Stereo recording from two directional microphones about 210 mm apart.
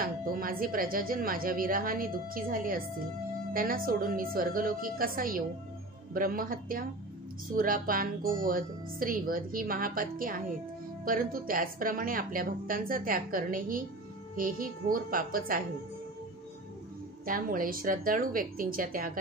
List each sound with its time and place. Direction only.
0.0 s speech: 45° right (ahead or behind)
17.3 s speech: 40° right (ahead or behind)